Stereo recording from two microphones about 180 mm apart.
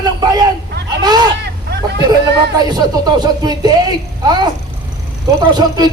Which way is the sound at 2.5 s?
25° right (ahead or behind).